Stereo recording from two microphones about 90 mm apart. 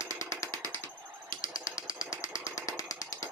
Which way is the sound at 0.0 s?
35° left (ahead or behind).